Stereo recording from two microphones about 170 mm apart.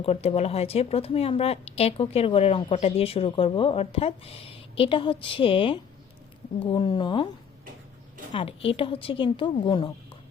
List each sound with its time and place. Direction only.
0.0 s speech: 35° left (ahead or behind)
8.3 s speech: 30° left (ahead or behind)